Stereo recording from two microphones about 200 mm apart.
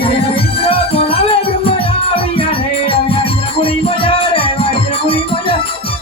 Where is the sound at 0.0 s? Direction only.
30° left (ahead or behind).